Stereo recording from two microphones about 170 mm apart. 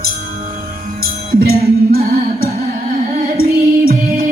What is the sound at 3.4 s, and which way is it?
Music, 60° right (ahead or behind).